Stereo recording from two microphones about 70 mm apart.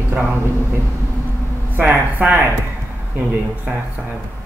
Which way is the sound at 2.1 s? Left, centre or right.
Right.